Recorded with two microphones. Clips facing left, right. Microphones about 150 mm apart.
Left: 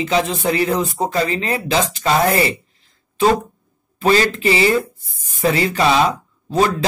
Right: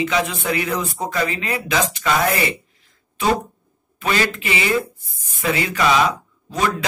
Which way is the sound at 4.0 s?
35° left (ahead or behind).